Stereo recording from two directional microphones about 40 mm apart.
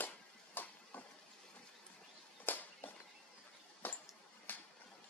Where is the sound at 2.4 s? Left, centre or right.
Left.